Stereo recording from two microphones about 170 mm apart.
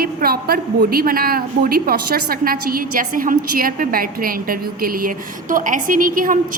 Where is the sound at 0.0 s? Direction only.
65° right (ahead or behind).